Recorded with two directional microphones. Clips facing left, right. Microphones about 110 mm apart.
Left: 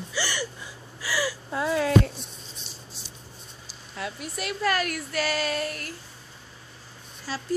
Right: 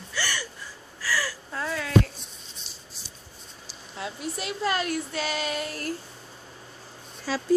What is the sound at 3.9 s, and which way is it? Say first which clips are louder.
A woman's voice: right 1 dB; 25° right (ahead or behind).